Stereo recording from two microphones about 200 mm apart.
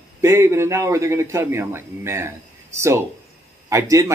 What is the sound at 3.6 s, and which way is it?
Speech, 15° right (ahead or behind).